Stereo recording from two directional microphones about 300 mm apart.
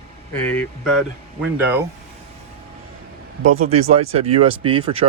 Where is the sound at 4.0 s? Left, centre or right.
Right.